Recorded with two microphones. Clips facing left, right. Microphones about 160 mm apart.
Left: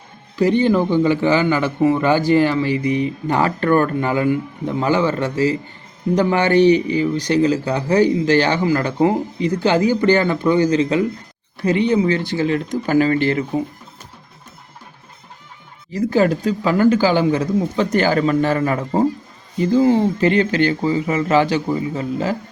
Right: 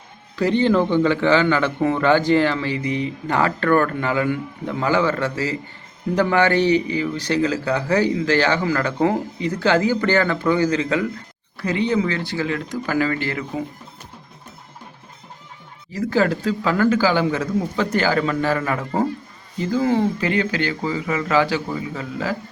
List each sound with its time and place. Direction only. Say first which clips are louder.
0.3 s speech: left 2 dB; 15° left (ahead or behind)
16.1 s speech: left 2 dB; 20° left (ahead or behind)
18.8 s speech: left 4 dB; 20° left (ahead or behind)